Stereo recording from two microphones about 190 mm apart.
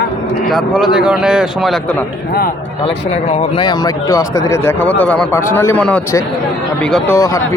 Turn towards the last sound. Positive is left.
turn(degrees=15)  # may be behind; listen again after turning